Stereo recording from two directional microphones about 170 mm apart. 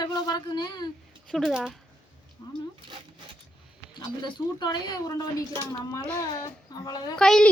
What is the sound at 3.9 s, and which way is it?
Speech, 25° left (ahead or behind).